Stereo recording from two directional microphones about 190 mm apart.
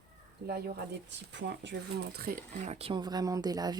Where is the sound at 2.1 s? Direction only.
50° right (ahead or behind); by 3.8 s 20° right (ahead or behind).